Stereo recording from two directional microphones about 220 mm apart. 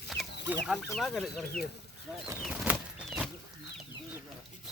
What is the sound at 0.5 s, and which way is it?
A man's voice, centre (ahead or behind).